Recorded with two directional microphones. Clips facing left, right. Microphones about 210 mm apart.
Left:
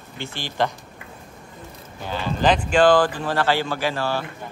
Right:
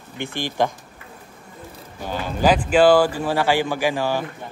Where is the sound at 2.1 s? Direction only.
10° right (ahead or behind).